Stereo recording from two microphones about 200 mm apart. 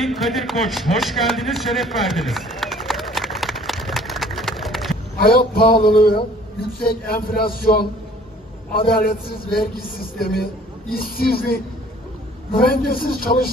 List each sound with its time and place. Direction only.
0.0 s a sound: centre (ahead or behind)
5.2 s speech: 50° left (ahead or behind)
8.7 s speech: 50° left (ahead or behind)